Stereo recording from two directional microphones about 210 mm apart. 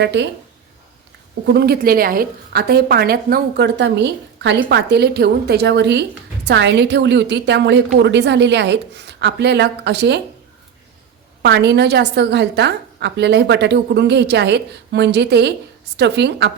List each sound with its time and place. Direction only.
0.0 s speech: 55° right (ahead or behind)
1.5 s a woman's voice: 50° right (ahead or behind)
11.4 s a woman's voice: 55° right (ahead or behind)